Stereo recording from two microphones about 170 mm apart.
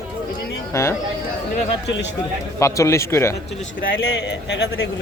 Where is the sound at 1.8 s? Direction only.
90° left.